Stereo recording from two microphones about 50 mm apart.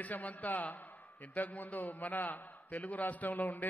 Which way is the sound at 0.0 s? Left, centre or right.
Left.